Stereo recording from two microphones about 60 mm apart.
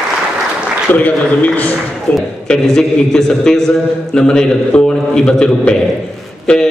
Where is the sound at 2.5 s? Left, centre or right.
Centre.